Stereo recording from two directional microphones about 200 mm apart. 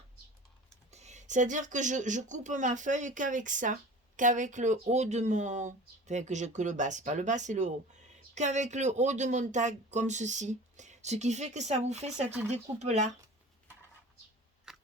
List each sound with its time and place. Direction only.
0.9 s speech: 35° right (ahead or behind)
14.7 s biting: 5° right (ahead or behind)